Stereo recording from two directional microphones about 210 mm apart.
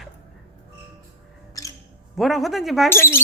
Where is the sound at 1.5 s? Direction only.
15° left (ahead or behind).